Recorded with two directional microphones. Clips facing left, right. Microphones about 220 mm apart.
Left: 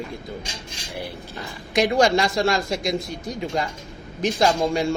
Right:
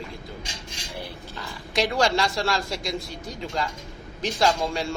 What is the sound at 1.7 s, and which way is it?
A man's voice, 20° left (ahead or behind).